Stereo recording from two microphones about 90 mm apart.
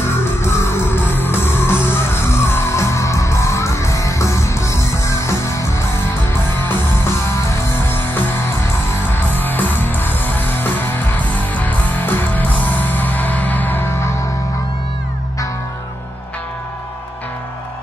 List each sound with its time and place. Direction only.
0.4 s music: 30° left (ahead or behind)